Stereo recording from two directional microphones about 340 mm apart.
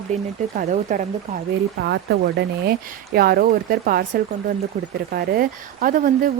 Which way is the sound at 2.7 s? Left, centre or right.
Right.